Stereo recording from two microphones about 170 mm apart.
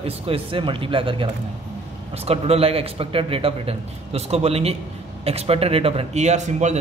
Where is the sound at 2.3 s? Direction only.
35° right (ahead or behind).